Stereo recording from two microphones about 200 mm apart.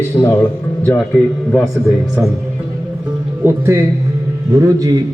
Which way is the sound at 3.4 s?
15° right (ahead or behind).